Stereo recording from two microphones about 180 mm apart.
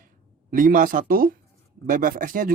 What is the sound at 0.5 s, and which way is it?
Speech, 50° right (ahead or behind).